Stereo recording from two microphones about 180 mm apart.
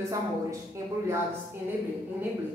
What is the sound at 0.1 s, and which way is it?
A woman's voice, 15° right (ahead or behind).